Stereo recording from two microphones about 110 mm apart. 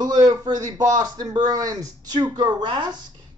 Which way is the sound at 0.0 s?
35° right (ahead or behind).